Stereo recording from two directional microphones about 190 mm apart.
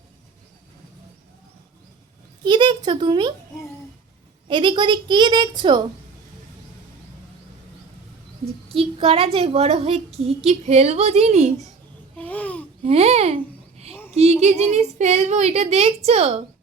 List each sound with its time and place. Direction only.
2.4 s a woman's voice: 25° right (ahead or behind)
4.4 s a woman's voice: 25° right (ahead or behind)
8.7 s a woman's voice: 30° right (ahead or behind)
12.1 s babbling: 5° left (ahead or behind)
12.8 s babbling: 35° right (ahead or behind)
14.7 s a woman's voice: 35° right (ahead or behind)